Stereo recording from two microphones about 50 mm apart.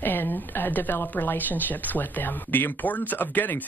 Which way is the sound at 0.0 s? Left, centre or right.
Left.